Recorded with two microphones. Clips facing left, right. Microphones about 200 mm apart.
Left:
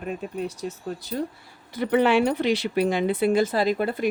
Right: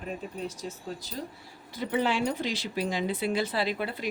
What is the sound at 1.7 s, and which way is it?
Speech, 65° left (ahead or behind).